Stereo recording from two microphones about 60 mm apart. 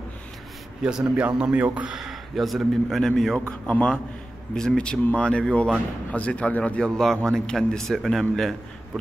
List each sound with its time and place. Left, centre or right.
0.8 s a man's voice: centre
2.0 s speech: centre
3.3 s speech: centre